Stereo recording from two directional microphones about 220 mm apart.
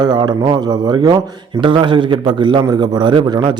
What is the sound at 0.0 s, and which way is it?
A man's voice, 20° right (ahead or behind).